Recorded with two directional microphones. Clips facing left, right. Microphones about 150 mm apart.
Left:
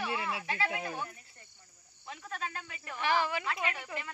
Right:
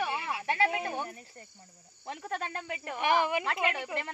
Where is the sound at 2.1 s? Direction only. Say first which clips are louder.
Right 4 dB; 60° right (ahead or behind).